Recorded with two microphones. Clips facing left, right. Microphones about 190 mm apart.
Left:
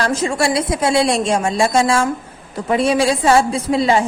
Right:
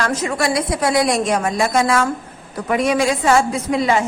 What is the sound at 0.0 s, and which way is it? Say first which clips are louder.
A woman's voice: left 2 dB; 30° left (ahead or behind).